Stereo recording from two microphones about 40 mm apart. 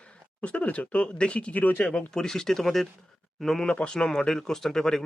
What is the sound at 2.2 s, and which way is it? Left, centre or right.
Speech, centre.